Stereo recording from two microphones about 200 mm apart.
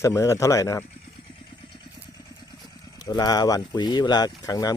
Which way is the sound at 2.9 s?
20° left (ahead or behind).